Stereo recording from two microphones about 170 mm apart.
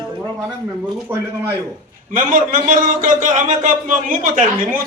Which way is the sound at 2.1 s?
50° right (ahead or behind).